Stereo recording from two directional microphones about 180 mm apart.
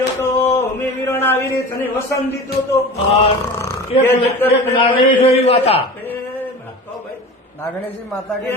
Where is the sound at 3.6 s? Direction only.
15° left (ahead or behind).